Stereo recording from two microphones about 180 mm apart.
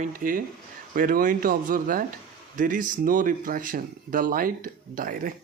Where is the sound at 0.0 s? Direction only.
50° right (ahead or behind).